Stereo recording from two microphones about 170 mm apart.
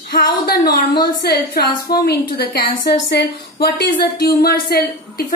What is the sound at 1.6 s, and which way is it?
Speech, 25° left (ahead or behind).